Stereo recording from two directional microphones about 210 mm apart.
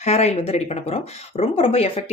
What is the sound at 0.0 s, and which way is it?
Speech, 30° left (ahead or behind).